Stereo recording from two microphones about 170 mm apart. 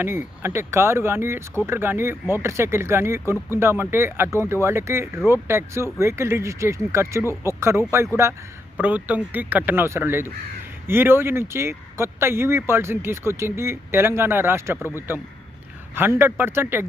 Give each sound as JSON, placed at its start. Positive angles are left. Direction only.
{"t": 0.0, "sound": "speech", "side_deg": -15}